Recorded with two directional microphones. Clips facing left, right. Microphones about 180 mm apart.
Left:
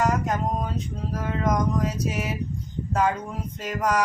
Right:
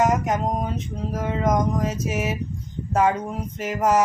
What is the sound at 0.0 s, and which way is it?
Speech, 20° right (ahead or behind).